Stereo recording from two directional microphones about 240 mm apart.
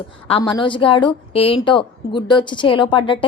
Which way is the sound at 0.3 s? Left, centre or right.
Left.